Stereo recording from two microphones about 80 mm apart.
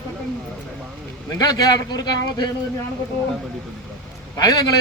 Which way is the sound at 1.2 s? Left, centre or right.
Left.